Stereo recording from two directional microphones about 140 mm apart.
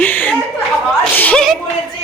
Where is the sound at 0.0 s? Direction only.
10° left (ahead or behind).